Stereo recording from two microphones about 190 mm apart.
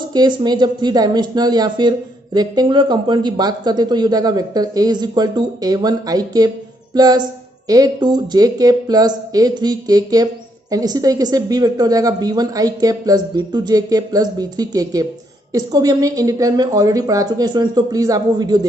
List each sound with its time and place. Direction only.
0.1 s speech: 20° right (ahead or behind)